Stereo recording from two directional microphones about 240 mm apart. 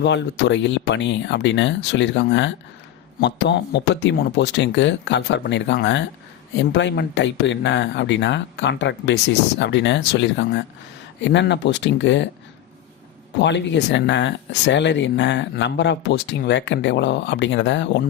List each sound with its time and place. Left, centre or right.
0.0 s speech: left
13.4 s speech: left